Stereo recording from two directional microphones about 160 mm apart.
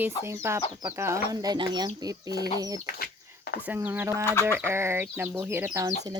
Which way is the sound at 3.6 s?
10° right (ahead or behind).